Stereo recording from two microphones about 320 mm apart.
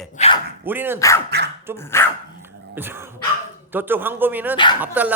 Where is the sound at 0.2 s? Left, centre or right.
Left.